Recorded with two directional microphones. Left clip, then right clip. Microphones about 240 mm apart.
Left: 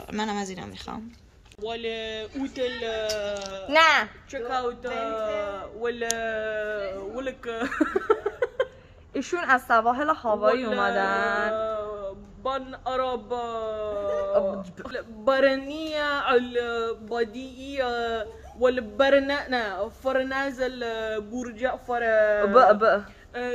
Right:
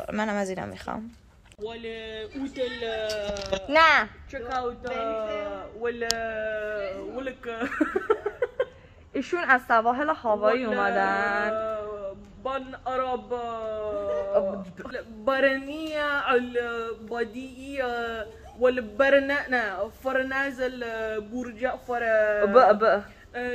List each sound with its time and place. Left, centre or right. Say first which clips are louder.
0.0 s a woman's voice: right 2 dB; centre
1.6 s speech: left 4 dB; left
3.6 s a woman's voice: even; centre
4.3 s speech: left 2 dB; centre
9.1 s a woman's voice: even; centre
11.5 s a sound: left 1 dB; centre
12.4 s a man's voice: left 1 dB; centre
22.5 s a woman's voice: even; centre
23.3 s speech: left 1 dB; centre